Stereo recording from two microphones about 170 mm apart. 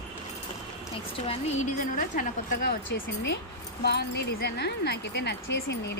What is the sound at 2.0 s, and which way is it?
Speech, 50° left (ahead or behind).